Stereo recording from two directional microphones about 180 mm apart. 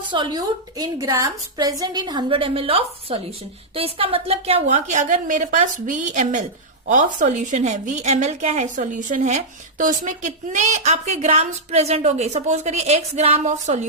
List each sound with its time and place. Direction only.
0.1 s a woman's voice: 25° right (ahead or behind); by 13.8 s 40° right (ahead or behind)